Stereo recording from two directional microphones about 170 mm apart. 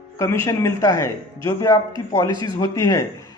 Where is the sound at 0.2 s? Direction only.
15° left (ahead or behind).